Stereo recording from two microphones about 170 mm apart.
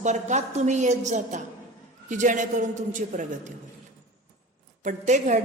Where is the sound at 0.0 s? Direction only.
45° right (ahead or behind).